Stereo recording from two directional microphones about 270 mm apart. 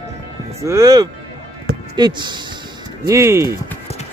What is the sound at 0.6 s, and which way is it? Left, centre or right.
Speech, centre.